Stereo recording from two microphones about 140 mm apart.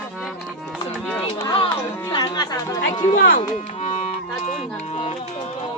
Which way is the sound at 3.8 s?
50° left (ahead or behind).